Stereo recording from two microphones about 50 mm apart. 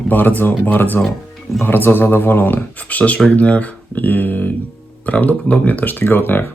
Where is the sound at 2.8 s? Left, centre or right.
Left.